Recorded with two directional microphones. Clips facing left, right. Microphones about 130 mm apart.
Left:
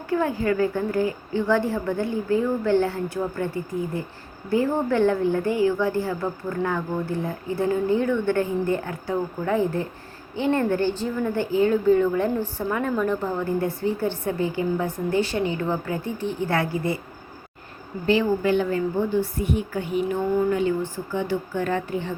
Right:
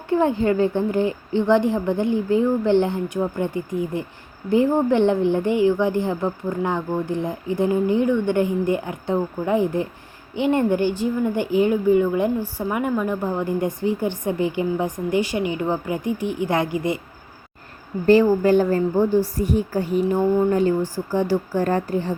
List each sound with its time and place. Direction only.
0.1 s a woman's voice: 25° right (ahead or behind)
18.0 s a woman's voice: 40° right (ahead or behind)